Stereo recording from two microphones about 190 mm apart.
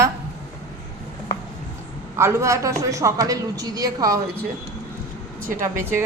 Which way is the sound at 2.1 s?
15° right (ahead or behind).